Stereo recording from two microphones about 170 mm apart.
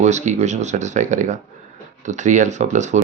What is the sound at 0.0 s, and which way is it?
Speech, 45° right (ahead or behind).